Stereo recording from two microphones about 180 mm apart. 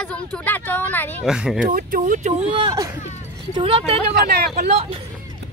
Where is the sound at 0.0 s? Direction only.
5° left (ahead or behind).